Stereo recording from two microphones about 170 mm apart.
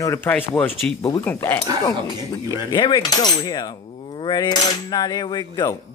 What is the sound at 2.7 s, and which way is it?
Cutlery, 25° left (ahead or behind).